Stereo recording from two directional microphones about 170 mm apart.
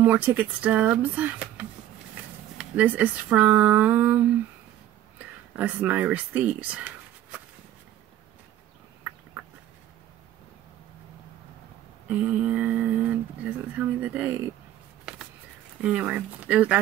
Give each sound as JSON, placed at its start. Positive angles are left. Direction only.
{"t": 0.0, "sound": "speech", "side_deg": -10}
{"t": 12.1, "sound": "speech", "side_deg": -10}
{"t": 15.8, "sound": "speech", "side_deg": -5}